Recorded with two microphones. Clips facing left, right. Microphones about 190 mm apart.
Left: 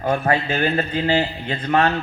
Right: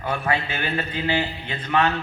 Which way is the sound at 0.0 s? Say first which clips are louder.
Left 5 dB; 45° left (ahead or behind).